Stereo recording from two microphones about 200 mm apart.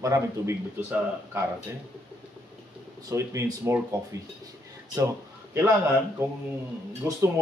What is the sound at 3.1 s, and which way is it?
Speech, 15° right (ahead or behind).